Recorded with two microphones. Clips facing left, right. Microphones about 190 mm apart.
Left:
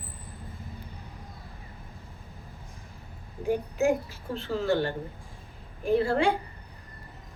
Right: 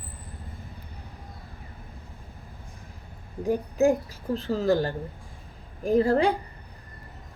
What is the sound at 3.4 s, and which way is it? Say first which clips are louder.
A woman's voice: right 3 dB; 35° right (ahead or behind).